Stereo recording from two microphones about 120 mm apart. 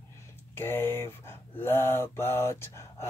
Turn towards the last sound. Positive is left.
turn(degrees=20)  # may be behind; listen again after turning